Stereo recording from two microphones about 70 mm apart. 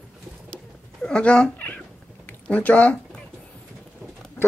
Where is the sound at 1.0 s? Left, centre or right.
Centre.